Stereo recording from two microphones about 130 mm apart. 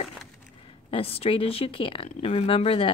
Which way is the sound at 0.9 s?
45° left (ahead or behind).